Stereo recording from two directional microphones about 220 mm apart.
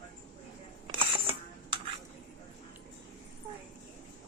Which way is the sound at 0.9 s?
25° right (ahead or behind).